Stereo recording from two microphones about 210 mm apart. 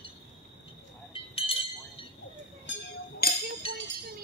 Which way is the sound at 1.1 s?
25° left (ahead or behind).